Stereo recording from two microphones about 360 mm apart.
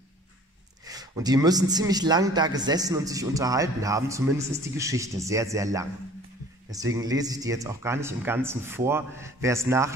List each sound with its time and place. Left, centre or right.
0.8 s a man's voice: centre